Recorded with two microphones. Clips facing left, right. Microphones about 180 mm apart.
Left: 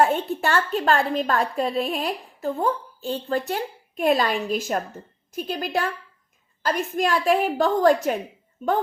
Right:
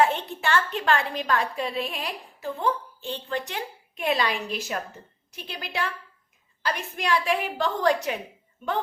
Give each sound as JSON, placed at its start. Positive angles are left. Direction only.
{"t": 0.0, "sound": "a woman's voice", "side_deg": 45}